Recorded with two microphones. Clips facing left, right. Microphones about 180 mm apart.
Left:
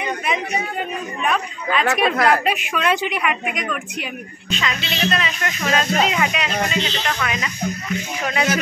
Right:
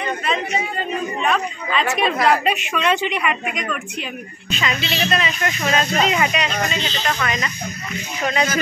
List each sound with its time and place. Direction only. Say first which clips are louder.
0.0 s chatter: even; 15° left (ahead or behind)
1.2 s a woman's voice: left 2 dB; 5° left (ahead or behind)
1.9 s a woman's voice: left 3 dB; 60° left (ahead or behind)
2.4 s a woman's voice: right 1 dB; 5° left (ahead or behind)
4.5 s speech: right 1 dB; 5° right (ahead or behind)